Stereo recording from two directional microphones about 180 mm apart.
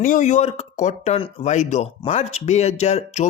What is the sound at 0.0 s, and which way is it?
Speech, 45° left (ahead or behind).